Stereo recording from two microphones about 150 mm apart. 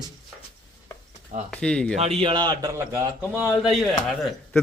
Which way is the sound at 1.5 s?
5° left (ahead or behind).